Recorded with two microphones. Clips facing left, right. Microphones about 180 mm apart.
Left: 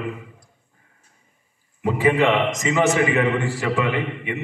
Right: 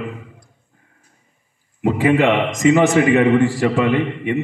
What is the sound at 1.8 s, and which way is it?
A man's voice, 55° right (ahead or behind).